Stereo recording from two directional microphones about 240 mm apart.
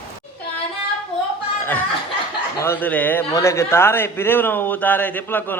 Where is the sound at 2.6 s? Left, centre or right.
Centre.